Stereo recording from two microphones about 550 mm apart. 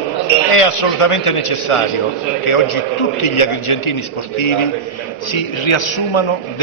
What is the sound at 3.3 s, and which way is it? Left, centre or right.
Speech, left.